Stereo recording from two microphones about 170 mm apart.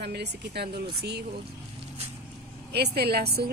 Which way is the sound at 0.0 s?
75° right (ahead or behind).